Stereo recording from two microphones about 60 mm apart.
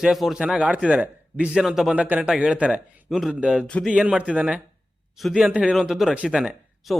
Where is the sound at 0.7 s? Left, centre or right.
Right.